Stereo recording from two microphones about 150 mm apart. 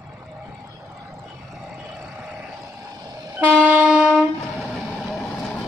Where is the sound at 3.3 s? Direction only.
10° right (ahead or behind).